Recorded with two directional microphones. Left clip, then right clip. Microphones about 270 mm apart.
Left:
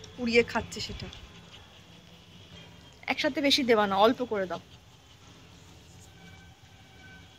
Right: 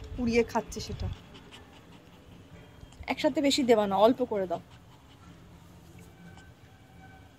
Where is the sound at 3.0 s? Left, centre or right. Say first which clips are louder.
Even; centre.